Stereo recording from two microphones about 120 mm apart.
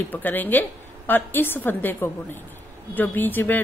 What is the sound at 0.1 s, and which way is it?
A woman's voice, 15° left (ahead or behind).